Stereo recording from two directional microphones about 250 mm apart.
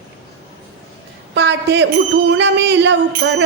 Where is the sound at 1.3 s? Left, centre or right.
Right.